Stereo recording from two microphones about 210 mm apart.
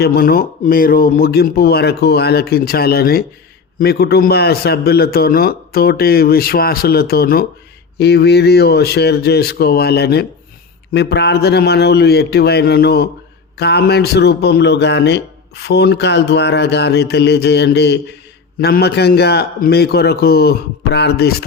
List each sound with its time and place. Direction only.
0.0 s a man's voice: 45° left (ahead or behind)